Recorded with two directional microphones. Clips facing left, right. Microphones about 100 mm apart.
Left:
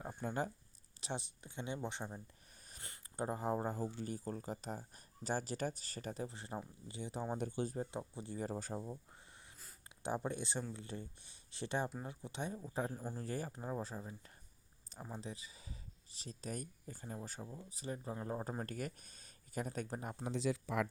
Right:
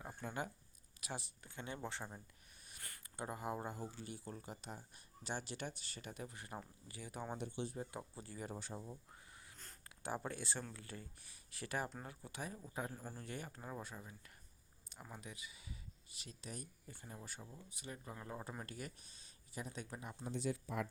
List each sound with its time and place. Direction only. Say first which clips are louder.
0.2 s speech: left 5 dB; 35° left (ahead or behind)
1.0 s speech: left 4 dB; 20° left (ahead or behind)
3.2 s speech: left 6 dB; 35° left (ahead or behind)
7.3 s speech: left 5 dB; 45° left (ahead or behind)
7.9 s speech: left 5 dB; 20° left (ahead or behind); by 8.9 s 40° left (ahead or behind)
10.2 s speech: left 4 dB; 20° left (ahead or behind)
12.9 s speech: left 5 dB; 15° left (ahead or behind)
13.1 s speech: left 6 dB; 35° left (ahead or behind)
20.2 s speech: left 3 dB; 90° left